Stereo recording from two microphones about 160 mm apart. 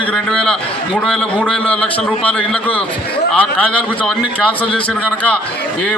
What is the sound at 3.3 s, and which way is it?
Speech, 5° left (ahead or behind).